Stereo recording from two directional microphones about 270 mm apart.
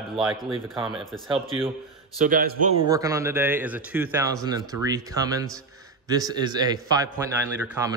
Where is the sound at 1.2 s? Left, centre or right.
Centre.